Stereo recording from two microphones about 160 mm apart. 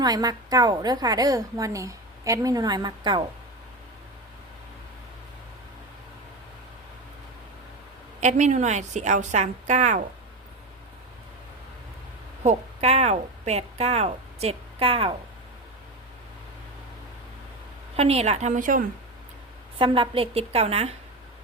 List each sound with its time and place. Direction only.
0.0 s a woman's voice: 25° right (ahead or behind)
8.2 s a woman's voice: 45° right (ahead or behind)
12.4 s a woman's voice: 45° right (ahead or behind)
17.9 s a woman's voice: 40° right (ahead or behind); by 18.9 s 55° right (ahead or behind)
19.8 s a woman's voice: 35° right (ahead or behind)